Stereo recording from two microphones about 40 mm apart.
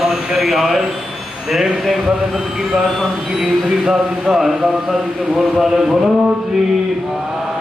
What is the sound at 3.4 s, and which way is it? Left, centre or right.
Speech, centre.